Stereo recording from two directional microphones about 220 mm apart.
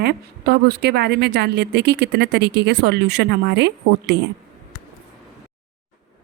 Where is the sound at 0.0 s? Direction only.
45° right (ahead or behind).